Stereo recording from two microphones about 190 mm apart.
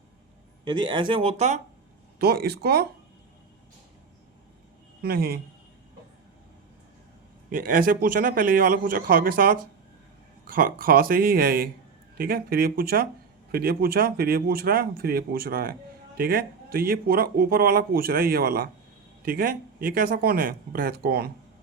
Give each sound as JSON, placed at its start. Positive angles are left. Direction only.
{"t": 0.6, "sound": "speech", "side_deg": -25}
{"t": 2.1, "sound": "speech", "side_deg": -55}
{"t": 5.0, "sound": "speech", "side_deg": -55}
{"t": 7.5, "sound": "speech", "side_deg": -45}